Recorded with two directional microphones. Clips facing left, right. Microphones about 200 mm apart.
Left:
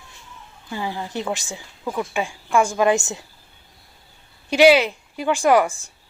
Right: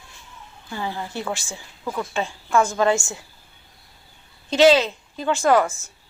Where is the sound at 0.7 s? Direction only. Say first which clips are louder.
Left 2 dB; 15° left (ahead or behind).